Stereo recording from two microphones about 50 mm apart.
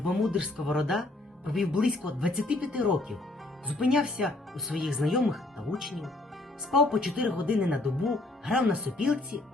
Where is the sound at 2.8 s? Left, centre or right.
Centre.